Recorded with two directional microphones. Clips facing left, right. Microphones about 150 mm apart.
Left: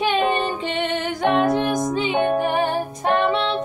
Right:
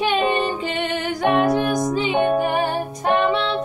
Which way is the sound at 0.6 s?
25° left (ahead or behind).